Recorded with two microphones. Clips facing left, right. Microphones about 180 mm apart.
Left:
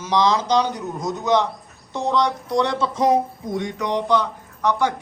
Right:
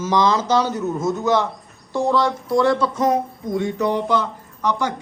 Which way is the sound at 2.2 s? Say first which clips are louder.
Right 4 dB; centre (ahead or behind).